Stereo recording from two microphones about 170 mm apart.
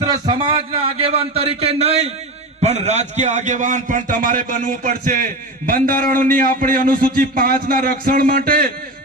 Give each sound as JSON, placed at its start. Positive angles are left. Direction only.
{"t": 0.0, "sound": "a man's voice", "side_deg": -25}